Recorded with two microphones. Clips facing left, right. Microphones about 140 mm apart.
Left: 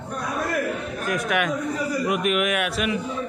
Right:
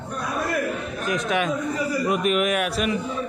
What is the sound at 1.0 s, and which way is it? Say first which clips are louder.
A man's voice: right 1 dB; 25° right (ahead or behind).